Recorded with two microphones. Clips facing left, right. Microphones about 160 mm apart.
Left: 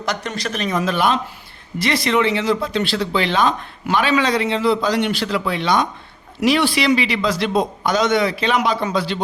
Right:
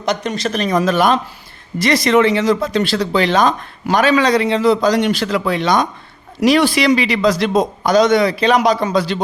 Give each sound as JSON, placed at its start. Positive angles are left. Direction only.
{"t": 0.0, "sound": "speech", "side_deg": -20}
{"t": 0.5, "sound": "a man's voice", "side_deg": -40}